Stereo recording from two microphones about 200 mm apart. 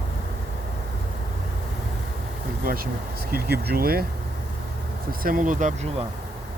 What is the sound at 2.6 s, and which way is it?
Speech, 45° right (ahead or behind).